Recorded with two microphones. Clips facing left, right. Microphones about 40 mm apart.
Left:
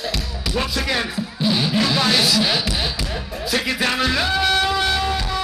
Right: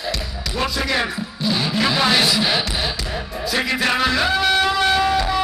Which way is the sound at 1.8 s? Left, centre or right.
Centre.